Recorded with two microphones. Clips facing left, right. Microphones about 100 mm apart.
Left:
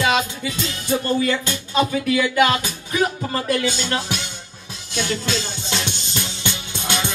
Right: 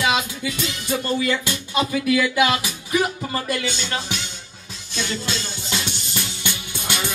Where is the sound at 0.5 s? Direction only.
35° left (ahead or behind).